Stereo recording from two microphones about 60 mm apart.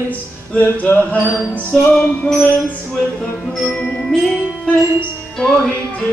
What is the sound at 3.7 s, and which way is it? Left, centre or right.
Music, centre.